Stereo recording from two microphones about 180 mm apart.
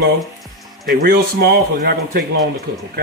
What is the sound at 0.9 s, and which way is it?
Speech, 55° right (ahead or behind).